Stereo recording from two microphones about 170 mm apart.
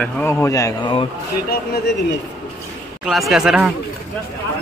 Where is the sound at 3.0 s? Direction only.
Centre (ahead or behind).